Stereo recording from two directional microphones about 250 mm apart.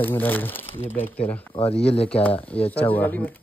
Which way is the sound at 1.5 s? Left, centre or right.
Left.